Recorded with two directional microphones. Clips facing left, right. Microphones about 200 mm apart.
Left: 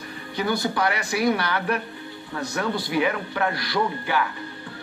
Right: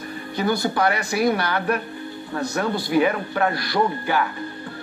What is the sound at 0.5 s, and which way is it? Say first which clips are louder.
Speech: right 3 dB; 40° right (ahead or behind).